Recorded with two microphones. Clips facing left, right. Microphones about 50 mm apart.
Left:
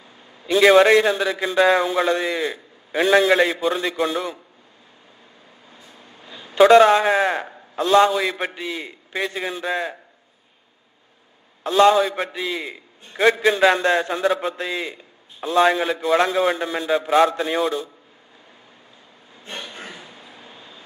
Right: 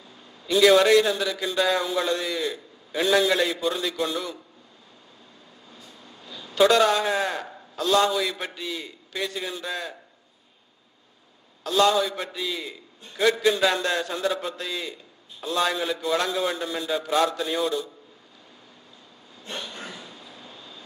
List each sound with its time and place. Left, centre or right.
0.4 s a man's voice: left
5.7 s a man's voice: left
11.6 s a man's voice: left
19.4 s vehicle: left